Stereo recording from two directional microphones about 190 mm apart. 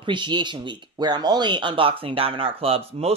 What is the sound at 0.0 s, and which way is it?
Speech, 25° right (ahead or behind).